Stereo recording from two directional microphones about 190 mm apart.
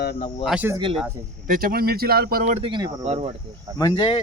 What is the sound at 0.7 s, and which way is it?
Speech, 25° right (ahead or behind).